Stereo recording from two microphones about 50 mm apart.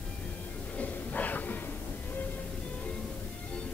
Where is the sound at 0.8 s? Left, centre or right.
Left.